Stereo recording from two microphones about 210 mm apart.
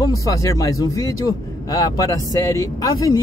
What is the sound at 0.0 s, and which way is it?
Speech, 15° left (ahead or behind).